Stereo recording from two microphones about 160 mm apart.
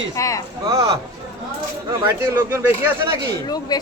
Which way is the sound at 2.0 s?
15° right (ahead or behind).